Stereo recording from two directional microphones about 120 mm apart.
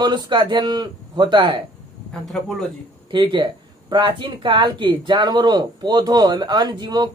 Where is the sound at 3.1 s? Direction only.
40° right (ahead or behind).